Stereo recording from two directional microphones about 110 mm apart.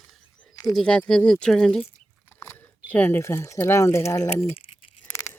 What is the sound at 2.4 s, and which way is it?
Biting, 25° left (ahead or behind).